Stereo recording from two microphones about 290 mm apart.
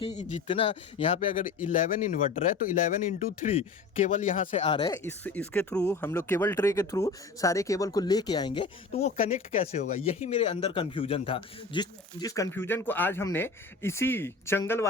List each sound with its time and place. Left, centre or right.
0.0 s speech: left